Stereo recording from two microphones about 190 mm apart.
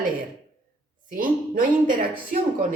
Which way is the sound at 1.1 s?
45° right (ahead or behind).